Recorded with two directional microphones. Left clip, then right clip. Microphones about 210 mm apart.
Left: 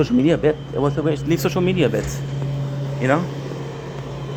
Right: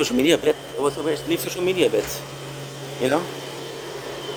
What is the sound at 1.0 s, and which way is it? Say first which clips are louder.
Speech: left 3 dB; 15° left (ahead or behind).